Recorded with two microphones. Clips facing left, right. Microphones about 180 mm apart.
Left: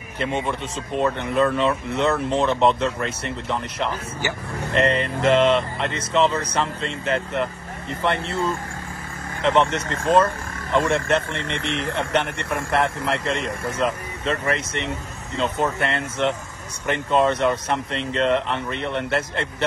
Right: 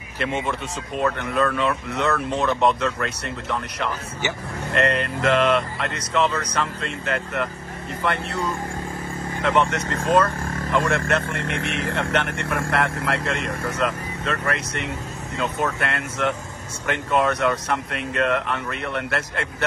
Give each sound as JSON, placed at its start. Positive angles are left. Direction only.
{"t": 0.2, "sound": "speech", "side_deg": 20}